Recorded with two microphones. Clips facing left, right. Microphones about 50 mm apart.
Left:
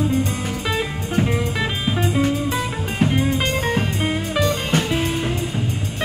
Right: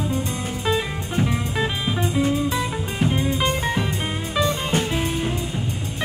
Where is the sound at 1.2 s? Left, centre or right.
Left.